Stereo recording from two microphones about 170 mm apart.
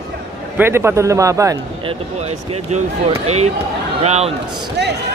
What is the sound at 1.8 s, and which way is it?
Speech, 40° right (ahead or behind).